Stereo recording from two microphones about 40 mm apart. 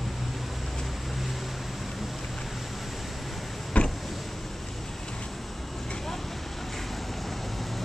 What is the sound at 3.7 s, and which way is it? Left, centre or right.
Vehicle, left.